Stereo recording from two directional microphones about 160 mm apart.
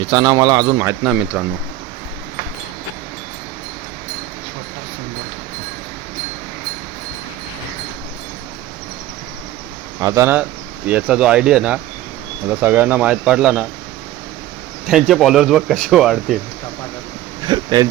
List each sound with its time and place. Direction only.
0.0 s a man's voice: 25° right (ahead or behind)
10.0 s speech: 20° right (ahead or behind)
14.8 s speech: centre (ahead or behind)
17.4 s a sound: 25° right (ahead or behind)